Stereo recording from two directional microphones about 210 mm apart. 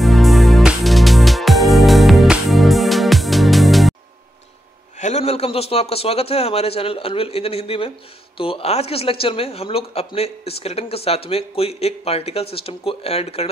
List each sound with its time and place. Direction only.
0.0 s music: centre (ahead or behind)
4.9 s a man's voice: 35° left (ahead or behind)